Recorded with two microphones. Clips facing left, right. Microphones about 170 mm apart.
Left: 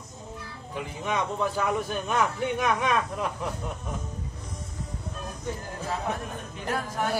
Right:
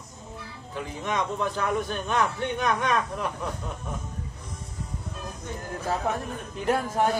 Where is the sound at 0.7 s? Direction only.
5° left (ahead or behind).